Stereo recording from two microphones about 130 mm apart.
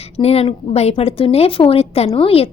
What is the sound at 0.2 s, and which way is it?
A woman's voice, 50° left (ahead or behind).